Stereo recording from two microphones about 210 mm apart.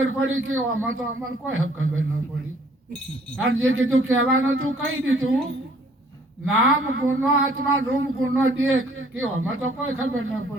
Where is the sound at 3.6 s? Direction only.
75° right (ahead or behind).